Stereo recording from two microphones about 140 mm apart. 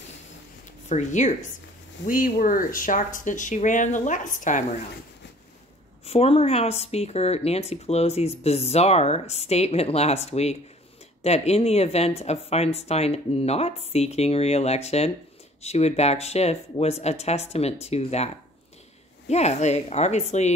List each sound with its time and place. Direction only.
0.8 s speech: 60° left (ahead or behind)
2.0 s speech: 75° left (ahead or behind)
6.0 s speech: 45° left (ahead or behind)